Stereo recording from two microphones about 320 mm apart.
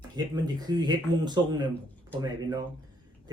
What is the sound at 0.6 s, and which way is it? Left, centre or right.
Speech, centre.